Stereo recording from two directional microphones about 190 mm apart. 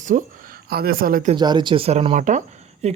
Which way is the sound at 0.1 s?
40° right (ahead or behind).